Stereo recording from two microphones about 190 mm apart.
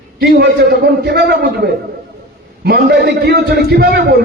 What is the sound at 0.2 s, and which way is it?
A man's voice, 55° right (ahead or behind).